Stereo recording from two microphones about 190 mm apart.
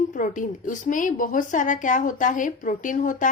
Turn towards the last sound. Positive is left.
turn(degrees=45)  # may be behind; listen again after turning